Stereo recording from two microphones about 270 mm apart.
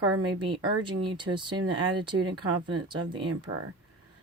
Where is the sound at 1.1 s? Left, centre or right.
Centre.